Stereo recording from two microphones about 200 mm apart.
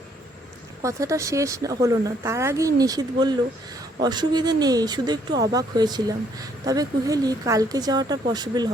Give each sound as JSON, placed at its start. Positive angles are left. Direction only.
{"t": 0.8, "sound": "speech", "side_deg": -15}